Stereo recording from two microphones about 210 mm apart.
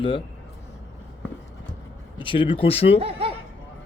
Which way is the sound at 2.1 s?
25° left (ahead or behind).